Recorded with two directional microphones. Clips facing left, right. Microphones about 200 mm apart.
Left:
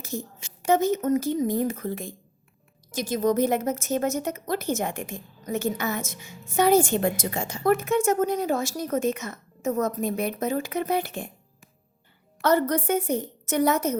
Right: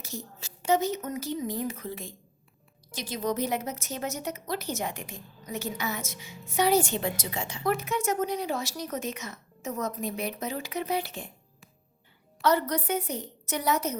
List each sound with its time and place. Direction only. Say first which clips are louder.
0.0 s a woman's voice: left 6 dB; 50° left (ahead or behind)
12.4 s a woman's voice: left 4 dB; 50° left (ahead or behind)